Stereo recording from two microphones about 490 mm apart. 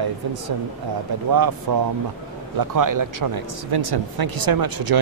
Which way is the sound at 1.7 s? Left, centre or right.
Right.